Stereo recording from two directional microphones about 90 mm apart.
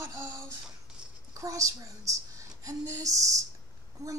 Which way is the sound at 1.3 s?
40° right (ahead or behind).